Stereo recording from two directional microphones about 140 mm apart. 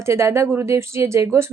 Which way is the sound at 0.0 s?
20° right (ahead or behind).